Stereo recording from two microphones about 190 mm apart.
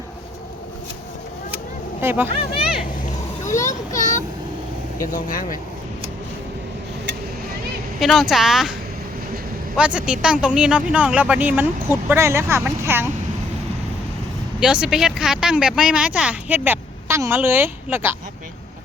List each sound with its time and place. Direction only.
2.0 s speech: 10° right (ahead or behind)
3.5 s a sound: 45° left (ahead or behind)
5.1 s speech: 45° left (ahead or behind)
7.9 s speech: centre (ahead or behind)
9.7 s speech: 5° right (ahead or behind)
14.6 s speech: 5° right (ahead or behind)